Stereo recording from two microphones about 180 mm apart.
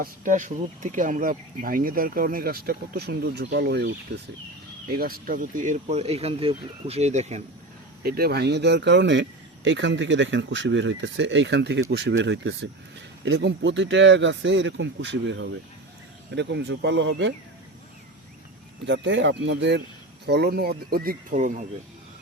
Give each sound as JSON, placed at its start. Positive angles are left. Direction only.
{"t": 0.0, "sound": "speech", "side_deg": -45}
{"t": 4.9, "sound": "speech", "side_deg": -55}
{"t": 8.0, "sound": "speech", "side_deg": -60}
{"t": 9.6, "sound": "speech", "side_deg": -90}
{"t": 16.3, "sound": "speech", "side_deg": -75}
{"t": 18.9, "sound": "speech", "side_deg": -90}